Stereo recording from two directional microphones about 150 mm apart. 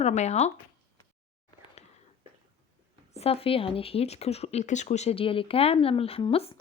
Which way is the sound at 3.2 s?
40° left (ahead or behind).